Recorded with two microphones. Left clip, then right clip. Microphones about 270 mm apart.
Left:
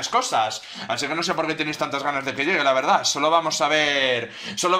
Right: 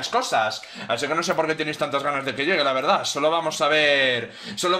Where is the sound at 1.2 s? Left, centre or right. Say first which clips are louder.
Right 1 dB; centre.